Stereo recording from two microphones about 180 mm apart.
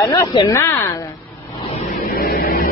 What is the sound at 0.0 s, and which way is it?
Speech, 20° left (ahead or behind).